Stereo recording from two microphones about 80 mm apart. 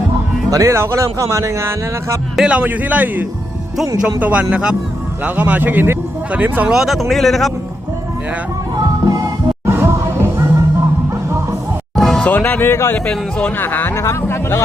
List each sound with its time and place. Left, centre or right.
0.5 s speech: right
2.3 s speech: centre
2.6 s speech: right
6.7 s a man's voice: centre
8.7 s music: right
9.6 s music: right
11.9 s music: centre
12.2 s speech: centre
13.9 s speech: left